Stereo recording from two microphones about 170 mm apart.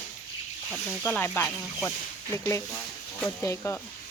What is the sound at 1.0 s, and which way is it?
Speech, 10° left (ahead or behind).